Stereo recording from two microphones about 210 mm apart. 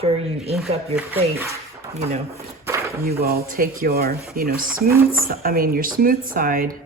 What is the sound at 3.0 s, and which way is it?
Speech, 45° right (ahead or behind).